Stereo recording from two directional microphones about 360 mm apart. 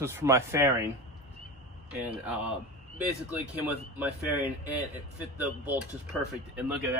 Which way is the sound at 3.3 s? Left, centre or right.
Centre.